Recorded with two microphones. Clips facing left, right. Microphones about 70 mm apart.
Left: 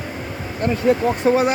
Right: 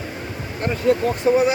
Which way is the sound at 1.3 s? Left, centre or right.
Left.